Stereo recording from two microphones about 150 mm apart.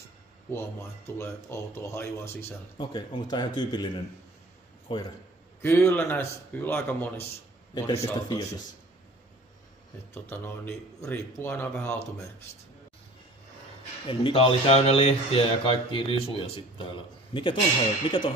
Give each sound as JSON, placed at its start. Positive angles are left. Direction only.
{"t": 0.5, "sound": "speech", "side_deg": 15}
{"t": 2.8, "sound": "speech", "side_deg": 30}
{"t": 5.6, "sound": "speech", "side_deg": 15}
{"t": 7.7, "sound": "a man's voice", "side_deg": 30}
{"t": 10.3, "sound": "speech", "side_deg": 15}
{"t": 14.0, "sound": "speech", "side_deg": 35}